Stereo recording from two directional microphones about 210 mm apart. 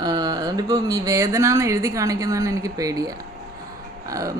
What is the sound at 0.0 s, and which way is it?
Speech, 20° right (ahead or behind).